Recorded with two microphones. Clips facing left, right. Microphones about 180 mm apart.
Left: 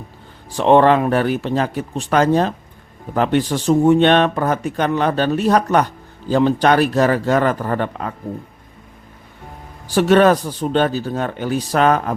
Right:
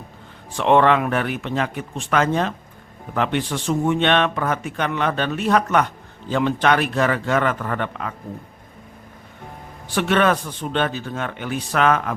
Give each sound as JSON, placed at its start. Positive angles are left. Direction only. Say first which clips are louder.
{"t": 0.5, "sound": "a man's voice", "louder": "left 4 dB", "side_deg": 35}
{"t": 9.9, "sound": "a man's voice", "louder": "left 6 dB", "side_deg": 40}